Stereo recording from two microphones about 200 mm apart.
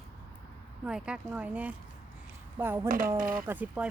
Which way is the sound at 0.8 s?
5° right (ahead or behind).